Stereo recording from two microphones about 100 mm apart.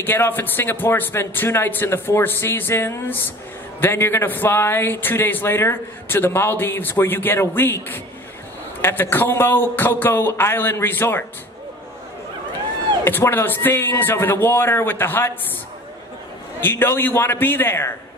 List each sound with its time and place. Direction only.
0.0 s a man's voice: 20° left (ahead or behind)
13.0 s a man's voice: 20° left (ahead or behind)
16.6 s a man's voice: 25° left (ahead or behind)